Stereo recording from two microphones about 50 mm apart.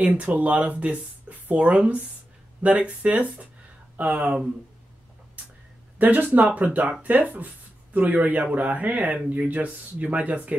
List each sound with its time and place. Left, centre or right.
0.0 s speech: right
5.9 s speech: right